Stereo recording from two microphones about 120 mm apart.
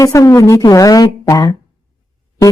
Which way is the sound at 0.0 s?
30° left (ahead or behind).